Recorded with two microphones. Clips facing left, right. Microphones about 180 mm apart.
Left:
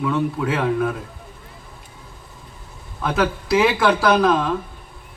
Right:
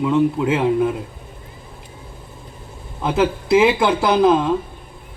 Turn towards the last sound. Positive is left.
turn(degrees=-20)  # may be behind; listen again after turning